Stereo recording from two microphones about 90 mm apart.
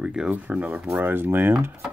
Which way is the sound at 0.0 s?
10° right (ahead or behind).